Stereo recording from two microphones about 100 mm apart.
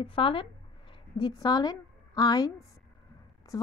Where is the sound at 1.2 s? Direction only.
45° left (ahead or behind).